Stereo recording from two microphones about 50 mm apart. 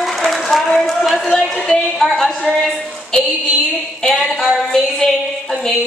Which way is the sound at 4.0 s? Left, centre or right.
Centre.